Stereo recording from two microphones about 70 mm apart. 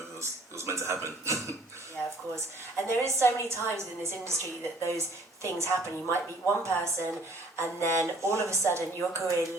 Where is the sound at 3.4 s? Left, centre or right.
Right.